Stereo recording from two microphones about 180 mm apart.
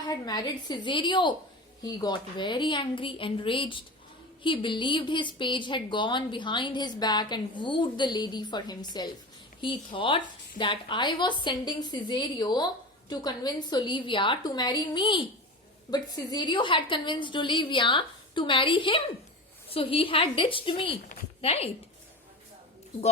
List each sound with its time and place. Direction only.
0.1 s a woman's voice: 20° left (ahead or behind)